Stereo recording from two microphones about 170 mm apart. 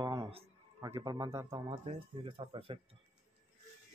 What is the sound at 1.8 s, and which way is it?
Speech, 35° right (ahead or behind).